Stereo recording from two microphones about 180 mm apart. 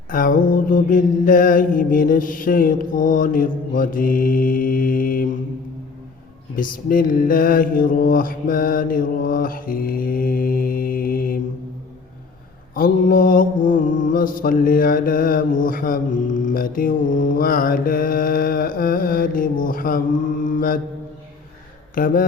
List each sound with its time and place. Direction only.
0.1 s mantra: 50° left (ahead or behind)
6.6 s mantra: 50° left (ahead or behind)
12.7 s mantra: 50° left (ahead or behind)
21.9 s mantra: 50° left (ahead or behind)